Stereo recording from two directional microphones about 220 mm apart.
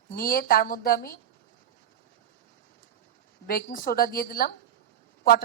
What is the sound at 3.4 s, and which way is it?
A woman's voice, 40° left (ahead or behind).